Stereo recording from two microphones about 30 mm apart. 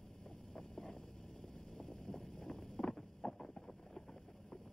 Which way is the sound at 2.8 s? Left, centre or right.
Centre.